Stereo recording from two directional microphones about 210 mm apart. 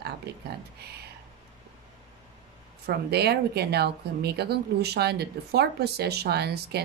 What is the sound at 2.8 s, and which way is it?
Speech, 50° right (ahead or behind).